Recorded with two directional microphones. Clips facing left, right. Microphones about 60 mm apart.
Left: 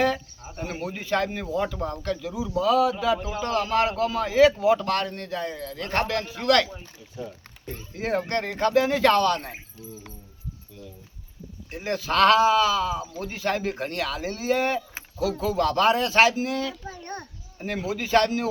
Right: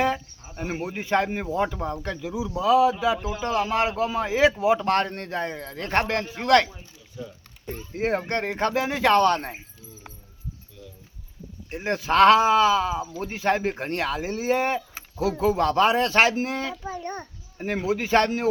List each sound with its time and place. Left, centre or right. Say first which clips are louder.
0.0 s a man's voice: even; right
3.2 s speech: even; centre
3.4 s a man's voice: even; centre
7.9 s a man's voice: right 1 dB; right
8.9 s a child's voice: left 1 dB; centre
9.1 s speech: right 3 dB; right
11.7 s a man's voice: right 3 dB; right
16.8 s a child's voice: right 4 dB; centre
17.6 s a man's voice: right 3 dB; right